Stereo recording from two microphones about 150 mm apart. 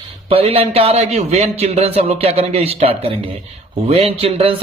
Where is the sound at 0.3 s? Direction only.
40° right (ahead or behind).